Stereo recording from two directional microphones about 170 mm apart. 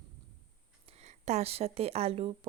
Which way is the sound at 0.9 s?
40° right (ahead or behind).